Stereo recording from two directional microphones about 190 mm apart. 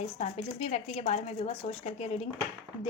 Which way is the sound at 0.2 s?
35° left (ahead or behind).